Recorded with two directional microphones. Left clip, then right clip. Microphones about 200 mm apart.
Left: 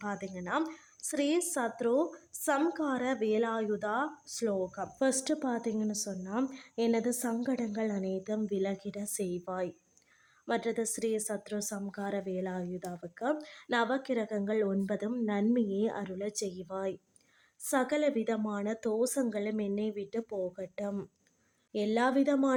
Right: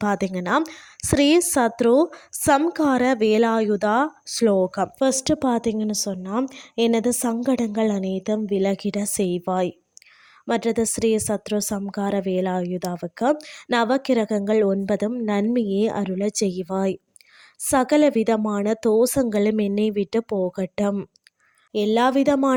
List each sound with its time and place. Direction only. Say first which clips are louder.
0.0 s a woman's voice: right 15 dB; 45° right (ahead or behind)